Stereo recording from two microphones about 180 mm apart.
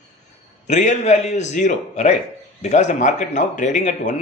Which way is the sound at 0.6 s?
40° left (ahead or behind).